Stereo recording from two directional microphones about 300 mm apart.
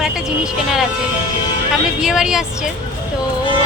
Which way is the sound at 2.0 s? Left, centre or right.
Centre.